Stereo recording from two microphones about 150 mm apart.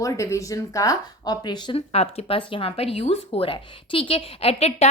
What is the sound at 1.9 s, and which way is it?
Speech, 45° left (ahead or behind).